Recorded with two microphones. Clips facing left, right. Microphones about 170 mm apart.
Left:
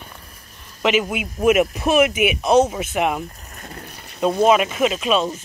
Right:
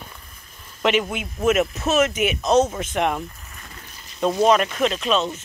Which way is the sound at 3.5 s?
50° left (ahead or behind).